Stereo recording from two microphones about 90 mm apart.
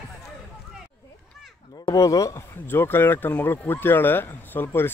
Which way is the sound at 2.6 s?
25° left (ahead or behind).